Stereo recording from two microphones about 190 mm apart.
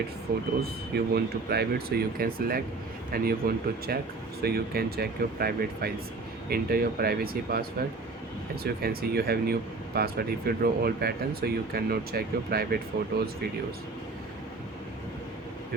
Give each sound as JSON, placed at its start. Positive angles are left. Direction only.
{"t": 0.6, "sound": "speech", "side_deg": -55}